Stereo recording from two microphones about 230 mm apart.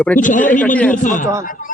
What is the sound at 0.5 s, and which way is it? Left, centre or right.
Speech, centre.